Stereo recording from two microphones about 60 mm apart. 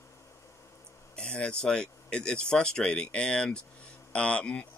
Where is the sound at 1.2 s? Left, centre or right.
Centre.